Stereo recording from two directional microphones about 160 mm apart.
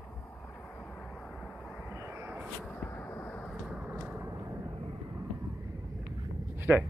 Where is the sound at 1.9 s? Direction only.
15° right (ahead or behind).